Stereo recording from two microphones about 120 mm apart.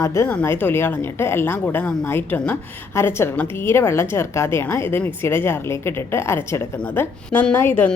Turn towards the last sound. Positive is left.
turn(degrees=20)  # may be behind; listen again after turning